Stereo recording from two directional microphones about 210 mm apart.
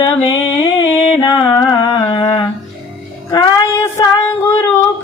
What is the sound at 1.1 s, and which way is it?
Music, 15° left (ahead or behind).